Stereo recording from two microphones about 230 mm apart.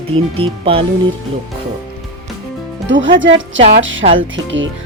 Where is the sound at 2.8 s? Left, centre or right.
Right.